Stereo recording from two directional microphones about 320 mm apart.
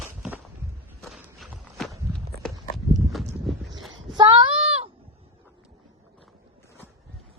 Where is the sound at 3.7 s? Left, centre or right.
Right.